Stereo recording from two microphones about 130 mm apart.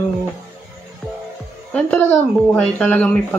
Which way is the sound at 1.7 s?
10° left (ahead or behind).